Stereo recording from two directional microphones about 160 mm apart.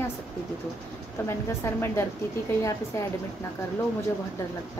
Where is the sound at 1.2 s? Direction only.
15° left (ahead or behind).